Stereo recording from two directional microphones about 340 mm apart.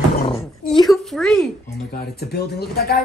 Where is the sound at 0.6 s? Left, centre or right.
Centre.